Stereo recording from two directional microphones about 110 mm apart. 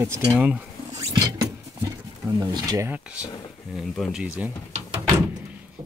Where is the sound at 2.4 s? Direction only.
35° right (ahead or behind).